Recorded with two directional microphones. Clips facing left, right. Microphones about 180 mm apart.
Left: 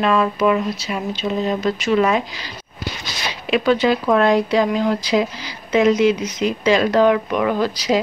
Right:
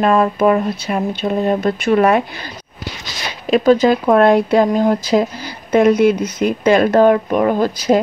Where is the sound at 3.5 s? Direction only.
40° right (ahead or behind).